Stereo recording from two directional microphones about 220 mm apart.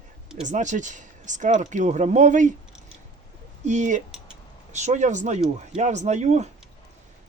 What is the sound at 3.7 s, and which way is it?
Speech, 35° right (ahead or behind).